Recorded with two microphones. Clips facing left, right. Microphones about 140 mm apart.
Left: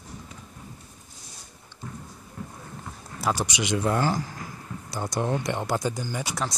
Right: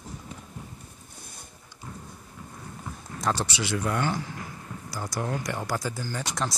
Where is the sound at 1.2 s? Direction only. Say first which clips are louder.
Right 3 dB; 55° right (ahead or behind).